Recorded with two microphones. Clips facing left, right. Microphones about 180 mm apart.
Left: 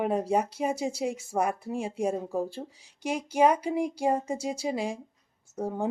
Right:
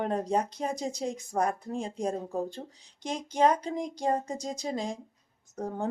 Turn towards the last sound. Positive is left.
turn(degrees=10)  # may be behind; listen again after turning